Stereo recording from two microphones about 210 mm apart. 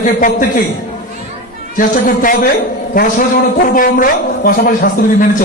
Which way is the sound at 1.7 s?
40° left (ahead or behind).